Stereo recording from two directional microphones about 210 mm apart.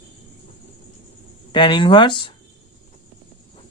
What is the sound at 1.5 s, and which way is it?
Speech, 25° left (ahead or behind).